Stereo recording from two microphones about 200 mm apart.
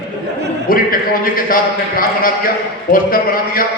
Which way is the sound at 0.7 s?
45° left (ahead or behind).